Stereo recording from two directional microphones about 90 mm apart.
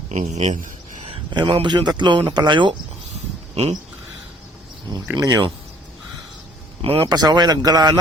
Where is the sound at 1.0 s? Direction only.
90° right.